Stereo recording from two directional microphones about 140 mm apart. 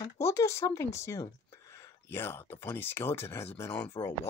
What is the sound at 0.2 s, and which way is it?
Speech, 20° left (ahead or behind).